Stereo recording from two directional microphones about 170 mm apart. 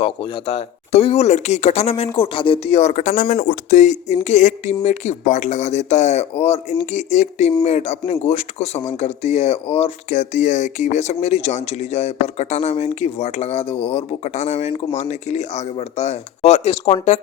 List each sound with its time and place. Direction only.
0.0 s speech: 30° left (ahead or behind)